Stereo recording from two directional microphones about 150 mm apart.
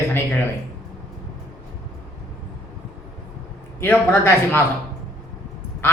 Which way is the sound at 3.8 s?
15° left (ahead or behind).